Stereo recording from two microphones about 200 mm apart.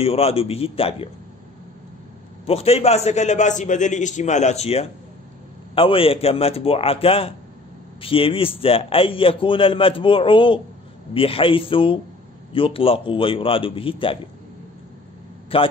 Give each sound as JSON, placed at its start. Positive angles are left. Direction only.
{"t": 0.0, "sound": "a man's voice", "side_deg": 30}
{"t": 2.4, "sound": "a man's voice", "side_deg": 30}
{"t": 15.5, "sound": "a man's voice", "side_deg": 25}